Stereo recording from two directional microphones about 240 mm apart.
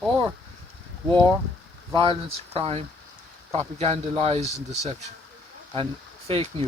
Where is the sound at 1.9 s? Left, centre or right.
Centre.